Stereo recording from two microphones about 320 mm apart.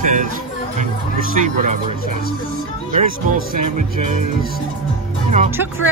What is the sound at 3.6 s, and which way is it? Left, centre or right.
Speech, right.